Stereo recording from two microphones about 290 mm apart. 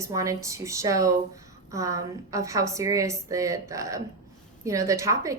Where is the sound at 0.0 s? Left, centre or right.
Centre.